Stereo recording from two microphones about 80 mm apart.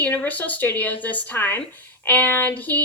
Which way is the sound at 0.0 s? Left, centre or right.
Left.